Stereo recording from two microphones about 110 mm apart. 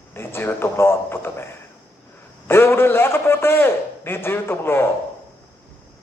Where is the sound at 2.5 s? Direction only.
20° left (ahead or behind).